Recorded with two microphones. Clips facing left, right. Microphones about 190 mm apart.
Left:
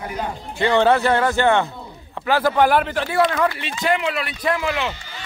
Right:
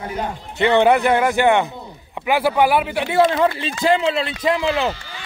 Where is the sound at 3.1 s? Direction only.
25° right (ahead or behind).